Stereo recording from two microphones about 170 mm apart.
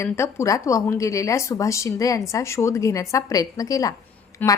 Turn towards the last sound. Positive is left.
turn(degrees=10)  # may be behind; listen again after turning